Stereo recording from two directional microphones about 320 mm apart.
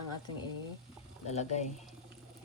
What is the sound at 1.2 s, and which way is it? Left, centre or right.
Speech, left.